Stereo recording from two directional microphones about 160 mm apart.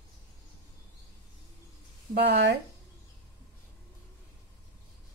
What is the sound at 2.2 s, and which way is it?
Speech, 90° right.